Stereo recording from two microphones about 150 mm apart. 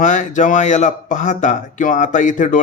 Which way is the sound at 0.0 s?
55° left (ahead or behind).